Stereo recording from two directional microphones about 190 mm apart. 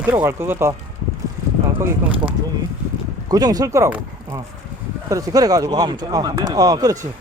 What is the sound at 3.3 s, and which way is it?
Speech, 20° right (ahead or behind).